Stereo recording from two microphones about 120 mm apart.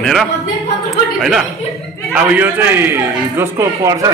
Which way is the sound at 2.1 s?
15° right (ahead or behind).